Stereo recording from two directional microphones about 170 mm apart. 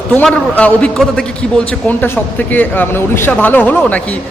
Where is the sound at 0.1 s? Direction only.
10° left (ahead or behind).